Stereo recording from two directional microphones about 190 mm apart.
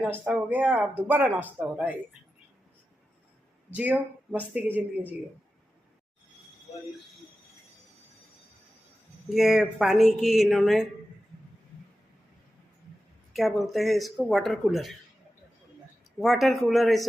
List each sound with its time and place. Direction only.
0.0 s speech: 5° right (ahead or behind)
3.7 s speech: 5° right (ahead or behind)
9.3 s speech: centre (ahead or behind)
13.3 s speech: centre (ahead or behind)
16.2 s speech: centre (ahead or behind)